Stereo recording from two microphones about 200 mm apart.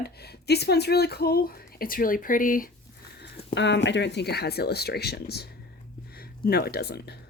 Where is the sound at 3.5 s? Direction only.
60° left (ahead or behind).